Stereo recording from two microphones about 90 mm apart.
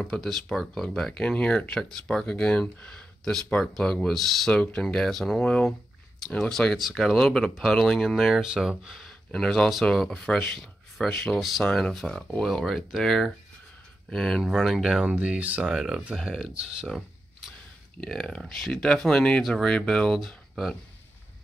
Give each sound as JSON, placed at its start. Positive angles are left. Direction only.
{"t": 0.0, "sound": "speech", "side_deg": 5}
{"t": 4.6, "sound": "speech", "side_deg": 15}
{"t": 15.1, "sound": "speech", "side_deg": -15}